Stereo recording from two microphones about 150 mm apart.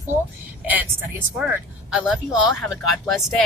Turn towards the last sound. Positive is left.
turn(degrees=0)  # may be behind; listen again after turning